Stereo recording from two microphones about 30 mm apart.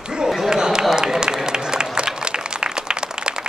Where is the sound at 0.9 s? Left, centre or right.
Right.